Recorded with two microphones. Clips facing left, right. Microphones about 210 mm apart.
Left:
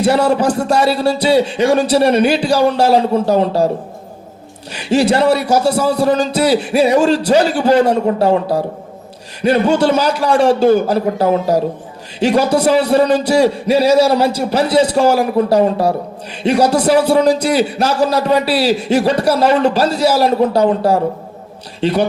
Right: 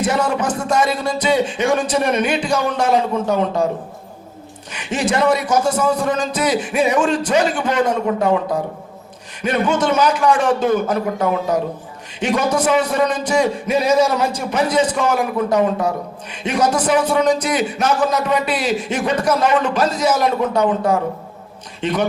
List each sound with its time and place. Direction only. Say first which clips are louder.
0.0 s a man's voice: left 6 dB; 35° left (ahead or behind)
4.7 s a man's voice: left 7 dB; 35° left (ahead or behind)